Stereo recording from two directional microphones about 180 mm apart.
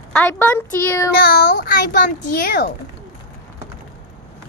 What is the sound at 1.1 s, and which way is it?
Speech, 55° left (ahead or behind).